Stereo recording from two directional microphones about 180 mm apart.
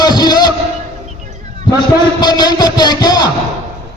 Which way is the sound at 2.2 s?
20° left (ahead or behind).